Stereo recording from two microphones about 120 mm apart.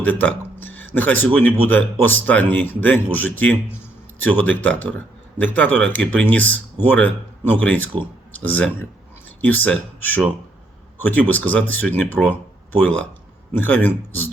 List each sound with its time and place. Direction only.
0.0 s speech: 15° left (ahead or behind)
13.5 s speech: 15° left (ahead or behind)